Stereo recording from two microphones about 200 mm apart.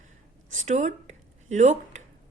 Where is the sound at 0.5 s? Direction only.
35° right (ahead or behind).